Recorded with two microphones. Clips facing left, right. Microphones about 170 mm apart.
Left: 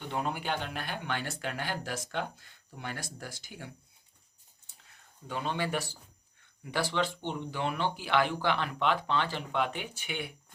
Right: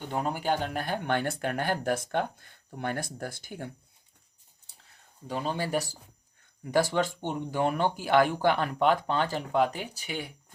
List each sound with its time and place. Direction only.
0.1 s speech: 40° right (ahead or behind)
5.3 s speech: 40° right (ahead or behind)